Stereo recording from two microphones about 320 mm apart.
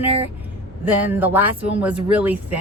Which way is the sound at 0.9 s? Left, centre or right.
Centre.